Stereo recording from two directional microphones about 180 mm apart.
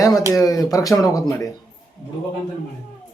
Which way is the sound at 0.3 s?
20° left (ahead or behind).